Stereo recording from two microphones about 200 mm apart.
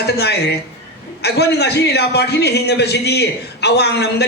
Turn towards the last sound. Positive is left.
turn(degrees=55)  # may be behind; listen again after turning